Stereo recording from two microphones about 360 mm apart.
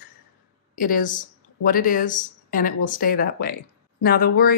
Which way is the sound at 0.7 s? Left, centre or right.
Left.